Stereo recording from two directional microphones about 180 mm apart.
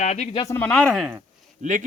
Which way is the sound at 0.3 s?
15° left (ahead or behind).